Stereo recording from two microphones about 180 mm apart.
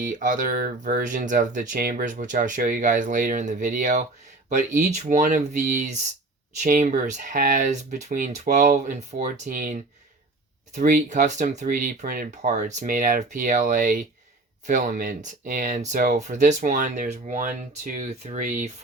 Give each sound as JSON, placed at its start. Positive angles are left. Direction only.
{"t": 0.0, "sound": "speech", "side_deg": -45}
{"t": 10.8, "sound": "speech", "side_deg": -45}